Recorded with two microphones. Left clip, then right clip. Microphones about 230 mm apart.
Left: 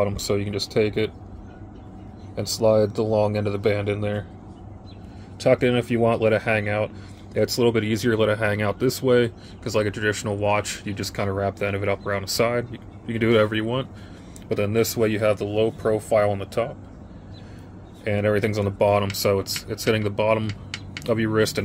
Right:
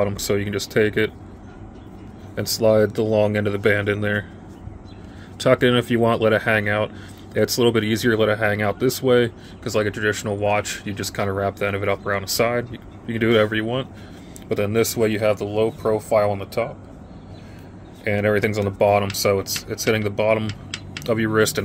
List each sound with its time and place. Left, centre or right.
0.0 s speech: centre
2.3 s speech: centre
5.4 s speech: centre
18.0 s speech: centre